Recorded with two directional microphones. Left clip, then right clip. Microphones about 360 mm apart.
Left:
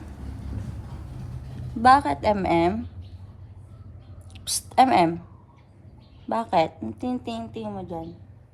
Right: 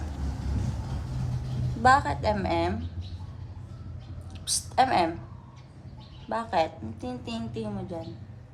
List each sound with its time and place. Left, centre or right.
1.8 s a woman's voice: centre
4.4 s a woman's voice: centre
6.3 s a woman's voice: centre